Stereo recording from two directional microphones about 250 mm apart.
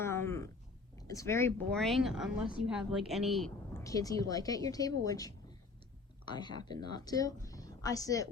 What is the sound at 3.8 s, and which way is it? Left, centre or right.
A woman's voice, centre.